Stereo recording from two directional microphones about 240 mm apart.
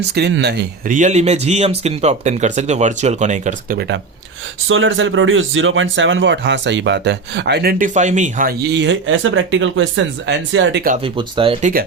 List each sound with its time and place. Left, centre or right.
0.1 s speech: right
10.9 s speech: right